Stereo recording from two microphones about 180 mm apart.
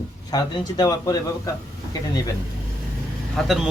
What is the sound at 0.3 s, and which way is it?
Speech, 20° left (ahead or behind).